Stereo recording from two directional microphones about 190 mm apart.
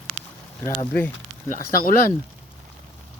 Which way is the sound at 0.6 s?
15° left (ahead or behind).